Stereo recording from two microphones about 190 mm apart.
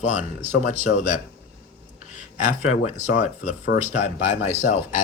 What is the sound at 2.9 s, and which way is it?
Speech, 40° left (ahead or behind).